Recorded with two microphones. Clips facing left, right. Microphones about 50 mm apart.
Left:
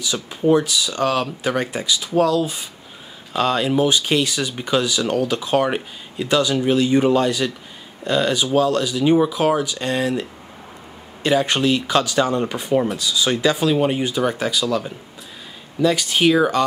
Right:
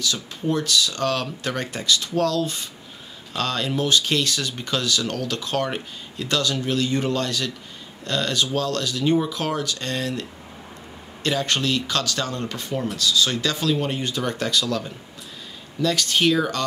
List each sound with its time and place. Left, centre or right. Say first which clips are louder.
0.0 s speech: left 6 dB; centre
11.2 s speech: left 5 dB; centre